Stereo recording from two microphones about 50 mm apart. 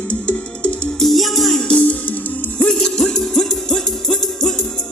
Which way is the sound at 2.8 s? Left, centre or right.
Centre.